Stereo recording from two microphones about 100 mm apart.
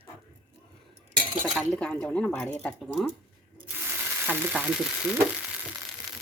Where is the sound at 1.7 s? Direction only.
10° left (ahead or behind).